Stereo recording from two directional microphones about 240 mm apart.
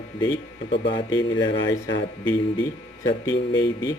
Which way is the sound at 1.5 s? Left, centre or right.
Left.